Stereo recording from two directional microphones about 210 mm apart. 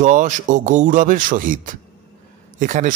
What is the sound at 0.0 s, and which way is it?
Speech, 35° right (ahead or behind).